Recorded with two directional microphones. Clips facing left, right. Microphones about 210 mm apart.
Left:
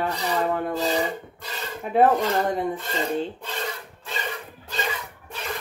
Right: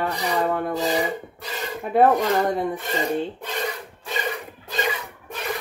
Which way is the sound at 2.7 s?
15° right (ahead or behind).